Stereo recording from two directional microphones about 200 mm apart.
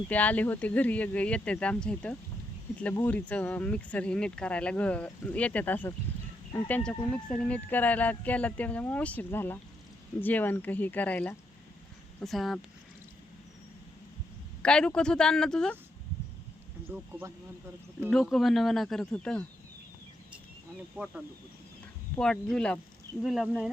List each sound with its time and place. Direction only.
0.1 s speech: 10° left (ahead or behind)
14.6 s speech: 5° left (ahead or behind)
16.9 s speech: 10° right (ahead or behind)
18.1 s speech: centre (ahead or behind)
20.9 s speech: 5° right (ahead or behind)